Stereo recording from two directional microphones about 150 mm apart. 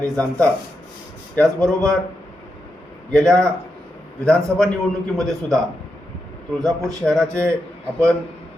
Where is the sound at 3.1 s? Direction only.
5° left (ahead or behind).